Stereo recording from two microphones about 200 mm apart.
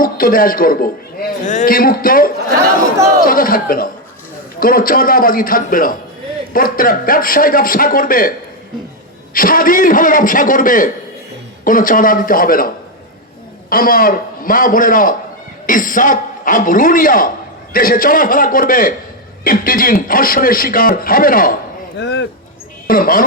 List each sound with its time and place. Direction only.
0.0 s a man's voice: 45° left (ahead or behind)
9.3 s a man's voice: 45° left (ahead or behind)
21.9 s speech: 60° left (ahead or behind)
22.9 s speech: 45° left (ahead or behind)